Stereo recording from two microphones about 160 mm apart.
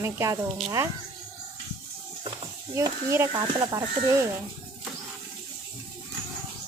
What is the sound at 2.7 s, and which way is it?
Speech, 20° right (ahead or behind).